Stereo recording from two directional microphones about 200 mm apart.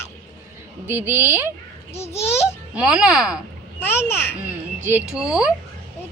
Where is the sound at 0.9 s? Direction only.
10° right (ahead or behind).